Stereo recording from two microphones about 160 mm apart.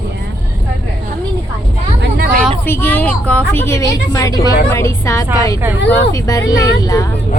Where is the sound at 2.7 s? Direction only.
15° left (ahead or behind).